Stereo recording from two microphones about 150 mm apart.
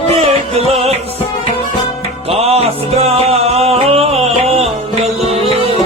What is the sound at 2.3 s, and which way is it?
Music, 45° right (ahead or behind).